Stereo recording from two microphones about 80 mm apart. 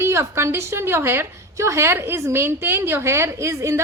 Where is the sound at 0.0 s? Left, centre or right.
Right.